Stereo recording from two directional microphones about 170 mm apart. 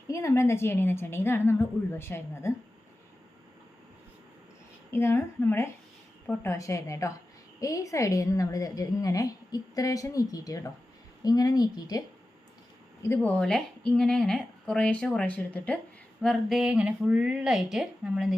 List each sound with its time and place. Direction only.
0.1 s a woman's voice: 15° left (ahead or behind)
4.9 s a woman's voice: 15° left (ahead or behind)
13.4 s speech: 5° left (ahead or behind)